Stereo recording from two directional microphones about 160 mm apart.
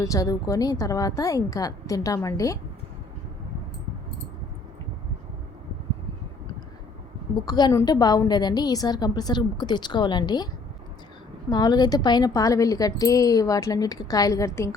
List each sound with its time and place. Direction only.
0.0 s a woman's voice: 20° left (ahead or behind)
7.4 s a woman's voice: 25° left (ahead or behind)